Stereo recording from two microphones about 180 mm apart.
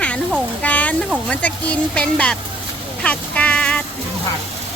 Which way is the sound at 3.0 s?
5° left (ahead or behind).